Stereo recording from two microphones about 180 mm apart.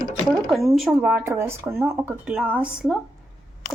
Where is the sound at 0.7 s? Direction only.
5° right (ahead or behind).